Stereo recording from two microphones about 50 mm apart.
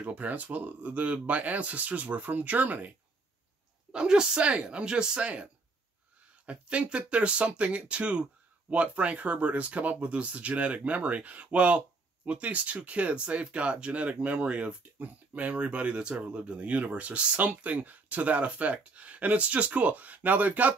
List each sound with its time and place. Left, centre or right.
0.0 s speech: right
3.9 s speech: centre; by 20.7 s right